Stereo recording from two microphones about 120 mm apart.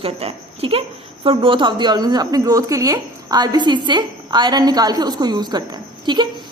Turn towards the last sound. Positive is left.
turn(degrees=-40)  # may be behind; listen again after turning